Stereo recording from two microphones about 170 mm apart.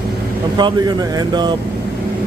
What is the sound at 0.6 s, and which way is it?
Speech, 25° right (ahead or behind).